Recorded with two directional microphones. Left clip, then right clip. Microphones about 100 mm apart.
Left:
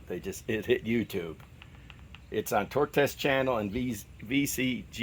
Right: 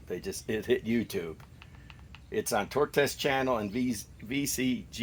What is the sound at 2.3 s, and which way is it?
Speech, 60° left (ahead or behind).